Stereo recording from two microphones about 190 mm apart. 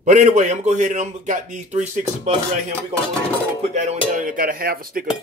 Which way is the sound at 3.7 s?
40° right (ahead or behind).